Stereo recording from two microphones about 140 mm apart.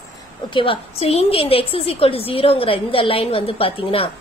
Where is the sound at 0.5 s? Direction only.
40° left (ahead or behind).